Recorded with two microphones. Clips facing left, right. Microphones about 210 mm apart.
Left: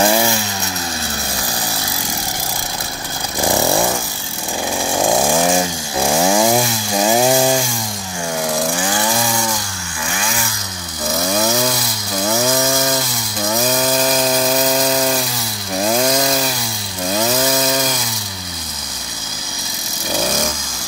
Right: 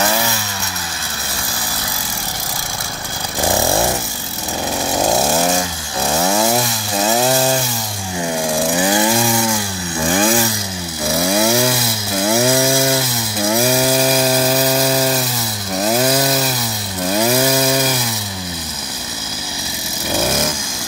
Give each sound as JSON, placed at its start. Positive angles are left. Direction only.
{"t": 0.0, "sound": "chainsaw", "side_deg": 25}
{"t": 6.2, "sound": "chainsaw", "side_deg": 15}
{"t": 10.0, "sound": "chainsaw", "side_deg": -35}
{"t": 11.1, "sound": "chainsaw", "side_deg": -10}